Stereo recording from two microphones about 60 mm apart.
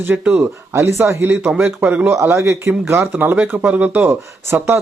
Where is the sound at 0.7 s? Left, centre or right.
Right.